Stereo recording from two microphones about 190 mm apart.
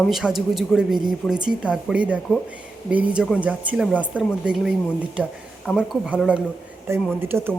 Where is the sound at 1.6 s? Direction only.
5° right (ahead or behind).